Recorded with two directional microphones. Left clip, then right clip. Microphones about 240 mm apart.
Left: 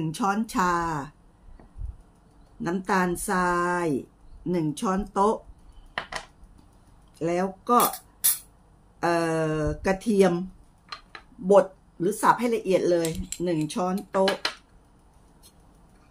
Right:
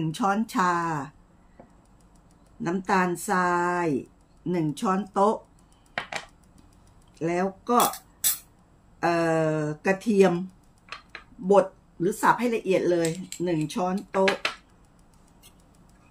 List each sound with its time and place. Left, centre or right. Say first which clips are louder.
0.0 s speech: right 1 dB; centre
2.6 s speech: right 1 dB; centre
7.2 s speech: even; centre
11.4 s speech: left 1 dB; centre